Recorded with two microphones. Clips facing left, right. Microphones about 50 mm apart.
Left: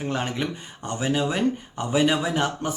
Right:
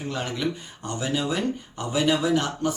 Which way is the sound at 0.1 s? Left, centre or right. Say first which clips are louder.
Right 1 dB; left.